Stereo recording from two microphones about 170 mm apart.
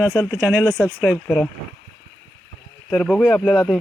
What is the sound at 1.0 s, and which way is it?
Speech, 5° left (ahead or behind).